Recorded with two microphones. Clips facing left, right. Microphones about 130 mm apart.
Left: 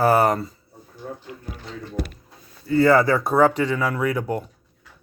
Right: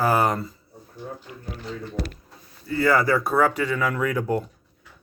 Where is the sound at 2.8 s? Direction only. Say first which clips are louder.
Left 4 dB; 25° left (ahead or behind).